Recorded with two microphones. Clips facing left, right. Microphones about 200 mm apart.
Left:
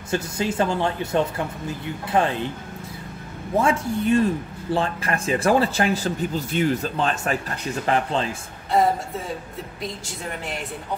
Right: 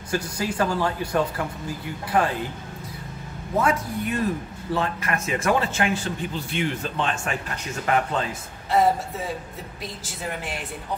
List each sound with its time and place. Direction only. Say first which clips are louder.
0.1 s speech: left 2 dB; 25° left (ahead or behind)
3.6 s speech: left 4 dB; 30° left (ahead or behind)